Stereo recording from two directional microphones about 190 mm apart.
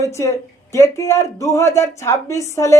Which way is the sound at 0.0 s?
15° left (ahead or behind).